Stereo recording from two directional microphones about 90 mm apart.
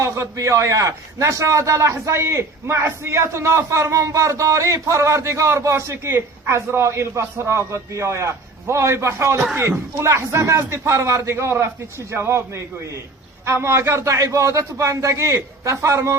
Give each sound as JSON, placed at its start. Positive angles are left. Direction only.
{"t": 0.0, "sound": "a man's voice", "side_deg": -35}